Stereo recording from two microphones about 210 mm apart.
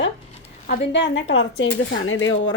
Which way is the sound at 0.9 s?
60° left (ahead or behind).